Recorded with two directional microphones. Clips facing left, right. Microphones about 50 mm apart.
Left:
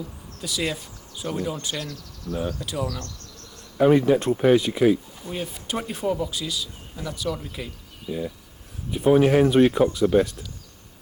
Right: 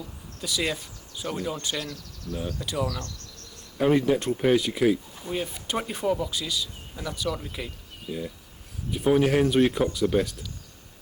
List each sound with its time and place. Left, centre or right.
0.4 s speech: centre
2.3 s speech: left
2.6 s speech: centre
3.8 s speech: centre
5.1 s speech: centre
9.1 s speech: centre